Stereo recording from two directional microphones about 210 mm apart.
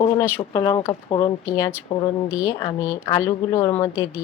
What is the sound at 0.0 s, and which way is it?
A woman's voice, 20° left (ahead or behind).